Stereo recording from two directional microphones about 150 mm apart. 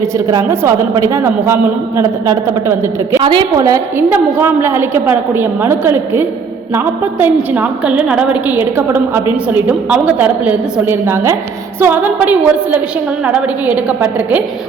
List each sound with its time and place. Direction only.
0.3 s a man's voice: 20° right (ahead or behind)
3.2 s a woman's voice: 35° right (ahead or behind); by 6.2 s 15° right (ahead or behind)
7.5 s a woman's voice: 10° right (ahead or behind)